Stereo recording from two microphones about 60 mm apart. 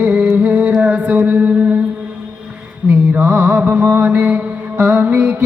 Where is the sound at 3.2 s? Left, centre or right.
Centre.